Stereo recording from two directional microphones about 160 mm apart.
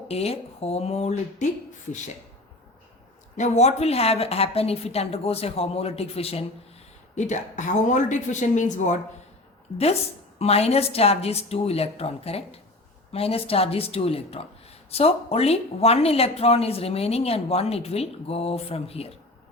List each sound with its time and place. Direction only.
0.1 s speech: 40° left (ahead or behind)
3.3 s speech: 50° left (ahead or behind)